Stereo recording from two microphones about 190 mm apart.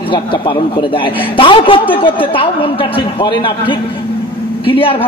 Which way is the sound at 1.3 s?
25° left (ahead or behind).